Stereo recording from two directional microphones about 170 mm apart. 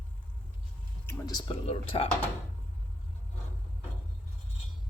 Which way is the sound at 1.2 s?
25° left (ahead or behind).